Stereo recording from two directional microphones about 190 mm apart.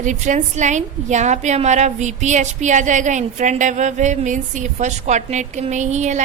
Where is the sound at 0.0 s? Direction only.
40° right (ahead or behind).